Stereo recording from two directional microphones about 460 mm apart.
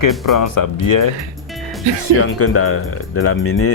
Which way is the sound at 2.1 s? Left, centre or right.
Left.